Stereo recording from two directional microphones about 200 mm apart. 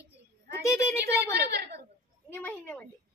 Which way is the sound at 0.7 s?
15° left (ahead or behind).